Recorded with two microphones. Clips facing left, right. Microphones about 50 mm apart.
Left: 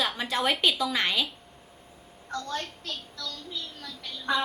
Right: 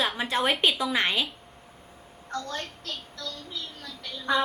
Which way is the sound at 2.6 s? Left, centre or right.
Right.